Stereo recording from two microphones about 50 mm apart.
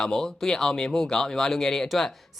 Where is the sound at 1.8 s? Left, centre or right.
Centre.